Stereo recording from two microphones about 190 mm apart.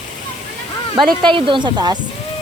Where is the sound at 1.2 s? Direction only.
25° right (ahead or behind).